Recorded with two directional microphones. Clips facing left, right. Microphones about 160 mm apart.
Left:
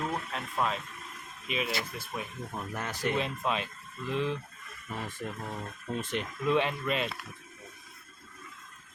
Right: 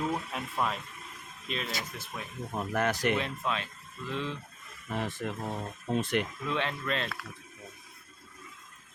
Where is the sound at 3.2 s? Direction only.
20° left (ahead or behind).